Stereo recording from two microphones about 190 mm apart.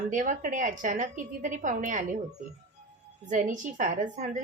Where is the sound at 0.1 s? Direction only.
40° right (ahead or behind).